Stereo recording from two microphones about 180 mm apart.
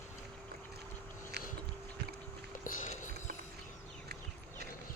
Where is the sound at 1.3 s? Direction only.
70° right (ahead or behind).